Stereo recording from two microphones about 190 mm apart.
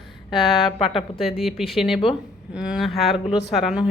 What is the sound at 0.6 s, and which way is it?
Speech, 30° left (ahead or behind).